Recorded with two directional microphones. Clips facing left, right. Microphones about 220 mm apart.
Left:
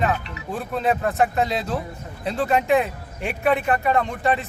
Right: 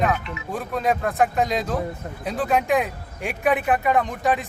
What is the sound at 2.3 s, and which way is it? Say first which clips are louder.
Speech: left 2 dB; centre (ahead or behind).